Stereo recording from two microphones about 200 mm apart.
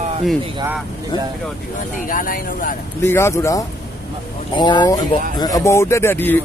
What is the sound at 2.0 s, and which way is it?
Speech, 45° left (ahead or behind).